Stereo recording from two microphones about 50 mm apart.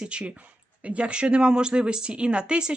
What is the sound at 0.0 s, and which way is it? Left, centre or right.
Speech, centre.